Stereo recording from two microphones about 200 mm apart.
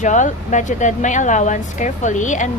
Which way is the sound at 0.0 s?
40° left (ahead or behind).